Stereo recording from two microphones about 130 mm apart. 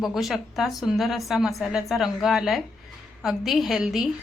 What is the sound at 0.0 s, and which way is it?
A woman's voice, centre (ahead or behind).